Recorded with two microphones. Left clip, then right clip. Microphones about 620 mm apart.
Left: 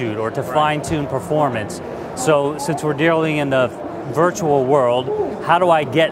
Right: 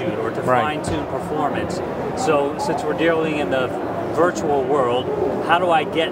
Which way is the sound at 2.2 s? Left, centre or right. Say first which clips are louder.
Left 3 dB; left.